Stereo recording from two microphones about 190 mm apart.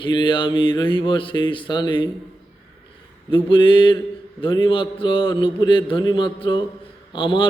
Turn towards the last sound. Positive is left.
turn(degrees=25)  # may be behind; listen again after turning